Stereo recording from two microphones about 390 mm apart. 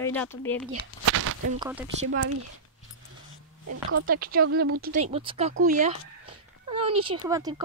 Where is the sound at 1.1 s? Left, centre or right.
Right.